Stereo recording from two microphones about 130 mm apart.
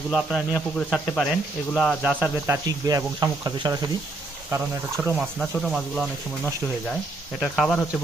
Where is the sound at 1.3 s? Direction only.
5° right (ahead or behind).